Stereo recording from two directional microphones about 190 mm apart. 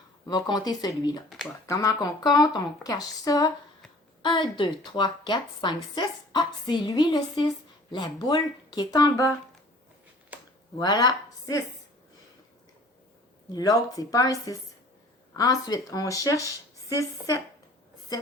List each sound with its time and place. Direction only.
0.3 s a woman's voice: 20° left (ahead or behind)
10.3 s a sound: 10° right (ahead or behind)
10.8 s speech: 20° left (ahead or behind)
13.5 s a woman's voice: 20° left (ahead or behind)